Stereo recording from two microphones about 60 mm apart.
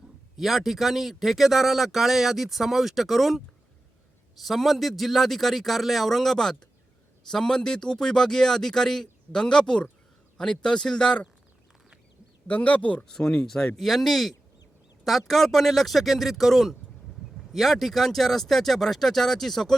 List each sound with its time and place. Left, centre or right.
0.3 s speech: centre
4.4 s speech: centre
12.5 s speech: left
13.1 s speech: centre
13.7 s speech: centre